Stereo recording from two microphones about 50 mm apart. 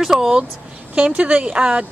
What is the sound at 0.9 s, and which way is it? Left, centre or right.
Speech, right.